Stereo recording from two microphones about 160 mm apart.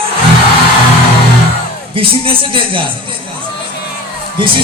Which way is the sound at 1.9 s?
35° right (ahead or behind).